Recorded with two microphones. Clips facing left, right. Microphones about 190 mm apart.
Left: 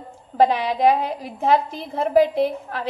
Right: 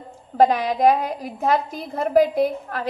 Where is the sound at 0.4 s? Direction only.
45° right (ahead or behind).